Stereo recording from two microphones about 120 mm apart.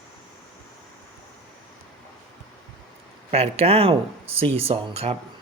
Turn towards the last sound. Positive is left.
turn(degrees=-55)  # may be behind; listen again after turning